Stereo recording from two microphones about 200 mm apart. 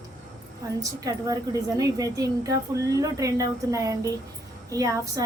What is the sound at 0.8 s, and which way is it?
A woman's voice, 15° right (ahead or behind).